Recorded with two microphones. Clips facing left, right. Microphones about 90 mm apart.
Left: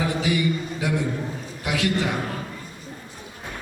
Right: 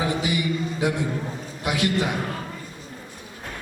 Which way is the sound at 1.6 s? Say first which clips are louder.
Even; 20° right (ahead or behind).